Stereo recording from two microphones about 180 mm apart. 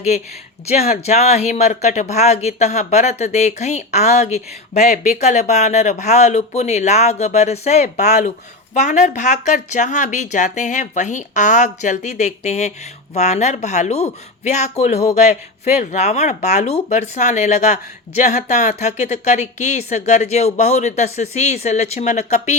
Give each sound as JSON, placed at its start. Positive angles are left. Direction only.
{"t": 0.7, "sound": "a woman's voice", "side_deg": 35}